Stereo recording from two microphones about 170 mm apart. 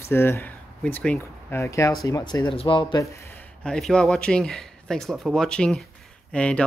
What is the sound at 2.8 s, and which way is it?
Speech, 20° left (ahead or behind).